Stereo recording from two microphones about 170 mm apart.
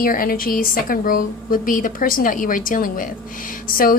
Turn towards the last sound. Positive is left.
turn(degrees=55)  # may be behind; listen again after turning